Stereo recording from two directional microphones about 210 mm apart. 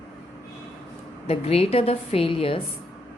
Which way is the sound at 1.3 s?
30° left (ahead or behind).